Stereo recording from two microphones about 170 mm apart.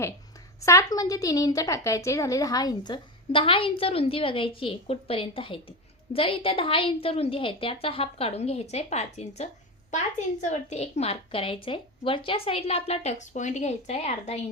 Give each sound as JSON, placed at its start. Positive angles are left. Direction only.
{"t": 0.6, "sound": "a woman's voice", "side_deg": 20}